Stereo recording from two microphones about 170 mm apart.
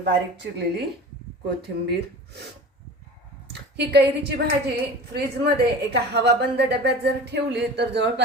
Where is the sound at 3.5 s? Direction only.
75° right (ahead or behind).